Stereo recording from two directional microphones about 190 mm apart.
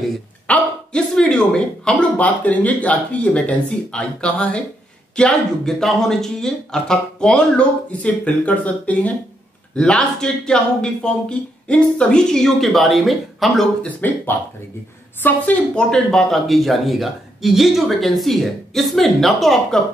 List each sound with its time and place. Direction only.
0.5 s speech: 5° left (ahead or behind)